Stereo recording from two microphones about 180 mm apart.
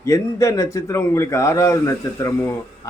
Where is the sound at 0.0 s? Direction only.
15° left (ahead or behind).